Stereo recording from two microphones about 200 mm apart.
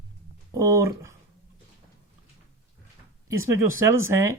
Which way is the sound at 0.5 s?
15° right (ahead or behind).